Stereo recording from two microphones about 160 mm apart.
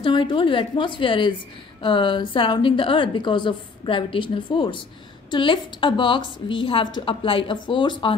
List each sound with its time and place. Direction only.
0.0 s a woman's voice: 30° left (ahead or behind)